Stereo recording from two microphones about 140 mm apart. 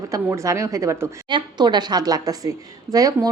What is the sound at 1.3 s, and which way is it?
A woman's voice, 30° right (ahead or behind).